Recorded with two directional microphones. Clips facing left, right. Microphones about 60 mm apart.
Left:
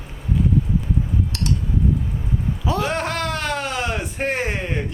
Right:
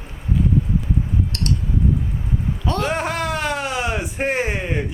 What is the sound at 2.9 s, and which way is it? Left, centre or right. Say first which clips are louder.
A man's voice: right 1 dB; centre.